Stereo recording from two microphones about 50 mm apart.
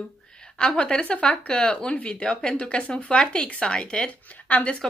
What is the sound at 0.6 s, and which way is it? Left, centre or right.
A woman's voice, centre.